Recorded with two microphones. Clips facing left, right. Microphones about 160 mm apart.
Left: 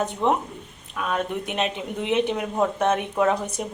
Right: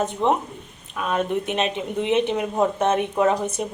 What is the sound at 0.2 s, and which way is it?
Speech, 20° right (ahead or behind).